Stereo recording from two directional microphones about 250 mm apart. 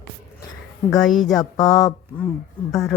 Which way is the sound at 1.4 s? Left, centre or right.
Centre.